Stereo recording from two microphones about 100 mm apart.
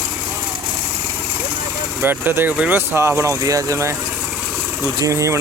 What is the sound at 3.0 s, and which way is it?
Speech, 30° right (ahead or behind).